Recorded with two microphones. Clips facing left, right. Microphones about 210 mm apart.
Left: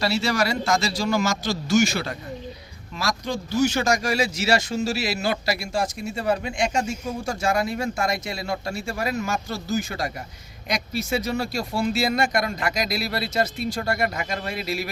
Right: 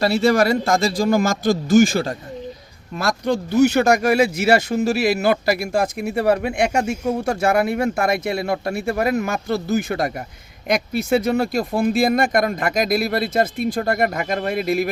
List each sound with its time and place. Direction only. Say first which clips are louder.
0.0 s speech: right 7 dB; 55° right (ahead or behind)
2.9 s speech: right 7 dB; 55° right (ahead or behind)